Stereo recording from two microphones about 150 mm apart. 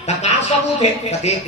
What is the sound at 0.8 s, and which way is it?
Speech, 45° left (ahead or behind).